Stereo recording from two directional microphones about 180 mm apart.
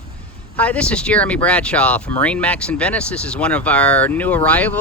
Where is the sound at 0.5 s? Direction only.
10° left (ahead or behind).